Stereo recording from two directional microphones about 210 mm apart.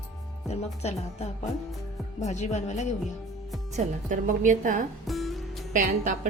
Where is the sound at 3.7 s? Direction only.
35° right (ahead or behind).